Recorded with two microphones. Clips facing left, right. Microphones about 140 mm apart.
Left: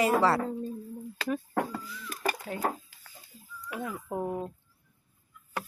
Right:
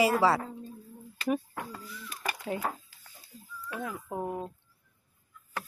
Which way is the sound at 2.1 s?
45° left (ahead or behind).